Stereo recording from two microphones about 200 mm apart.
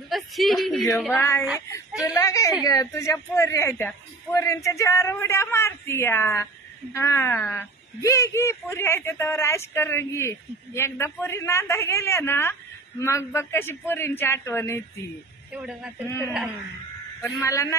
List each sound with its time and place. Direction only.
0.1 s speech: centre (ahead or behind)
1.1 s speech: 15° left (ahead or behind)
15.5 s speech: 5° right (ahead or behind)
16.1 s speech: 15° left (ahead or behind)